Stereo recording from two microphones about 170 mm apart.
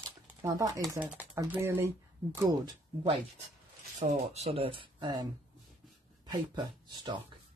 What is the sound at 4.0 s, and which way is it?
Speech, 40° right (ahead or behind).